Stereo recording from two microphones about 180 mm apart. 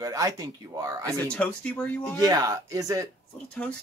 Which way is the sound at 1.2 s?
5° left (ahead or behind).